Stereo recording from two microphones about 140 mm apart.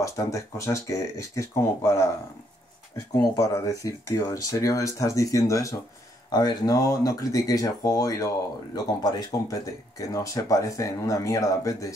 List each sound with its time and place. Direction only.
0.0 s speech: 20° left (ahead or behind)
3.2 s speech: 25° left (ahead or behind)